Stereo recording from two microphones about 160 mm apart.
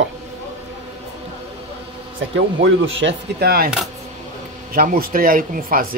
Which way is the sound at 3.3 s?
70° right (ahead or behind).